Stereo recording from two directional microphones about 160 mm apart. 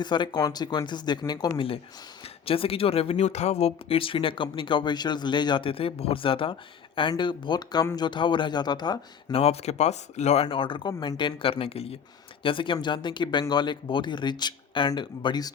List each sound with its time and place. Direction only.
0.0 s speech: 30° left (ahead or behind)
9.4 s speech: 40° left (ahead or behind); by 15.5 s 25° left (ahead or behind)